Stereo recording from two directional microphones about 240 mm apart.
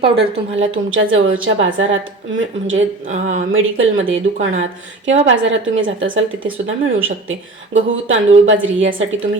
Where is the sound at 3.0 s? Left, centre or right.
Right.